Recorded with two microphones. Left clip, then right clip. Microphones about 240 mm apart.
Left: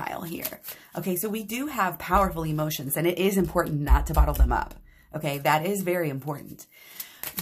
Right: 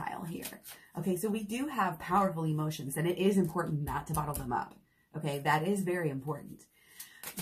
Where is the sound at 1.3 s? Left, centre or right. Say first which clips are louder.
Left 4 dB; left.